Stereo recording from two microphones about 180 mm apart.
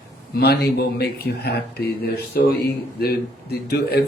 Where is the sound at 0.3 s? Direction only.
60° left (ahead or behind).